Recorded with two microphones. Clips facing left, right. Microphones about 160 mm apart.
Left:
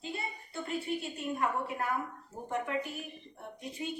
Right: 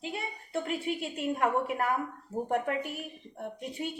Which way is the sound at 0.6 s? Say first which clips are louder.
Left 1 dB; 80° right.